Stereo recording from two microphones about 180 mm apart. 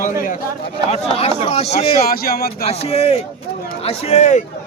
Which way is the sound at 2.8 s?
35° left (ahead or behind).